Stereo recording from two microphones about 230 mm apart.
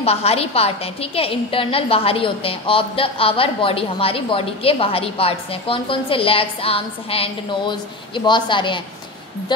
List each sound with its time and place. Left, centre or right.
0.0 s a woman's voice: left